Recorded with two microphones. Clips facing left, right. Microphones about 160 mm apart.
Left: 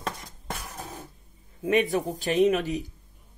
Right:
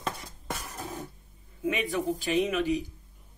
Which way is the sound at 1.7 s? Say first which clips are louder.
Left 5 dB; 40° left (ahead or behind).